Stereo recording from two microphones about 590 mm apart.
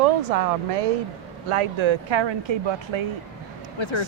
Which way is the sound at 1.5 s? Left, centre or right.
Right.